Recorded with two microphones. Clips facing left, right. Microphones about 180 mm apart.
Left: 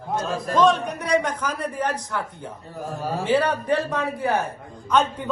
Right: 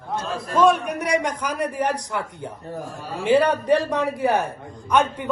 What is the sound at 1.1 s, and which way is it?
A man's voice, 15° right (ahead or behind).